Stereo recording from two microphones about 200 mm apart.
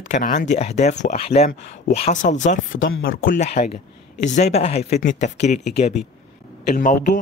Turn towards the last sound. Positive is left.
turn(degrees=40)  # may be behind; listen again after turning